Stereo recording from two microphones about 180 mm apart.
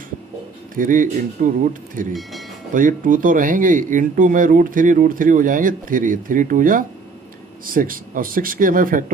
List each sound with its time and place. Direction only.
0.8 s speech: 45° right (ahead or behind)